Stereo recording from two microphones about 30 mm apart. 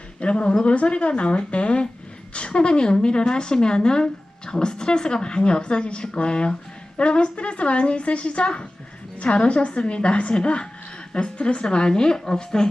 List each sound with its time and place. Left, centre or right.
0.2 s a woman's voice: left